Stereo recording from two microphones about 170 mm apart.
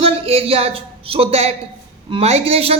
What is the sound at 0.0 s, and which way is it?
A man's voice, 35° right (ahead or behind).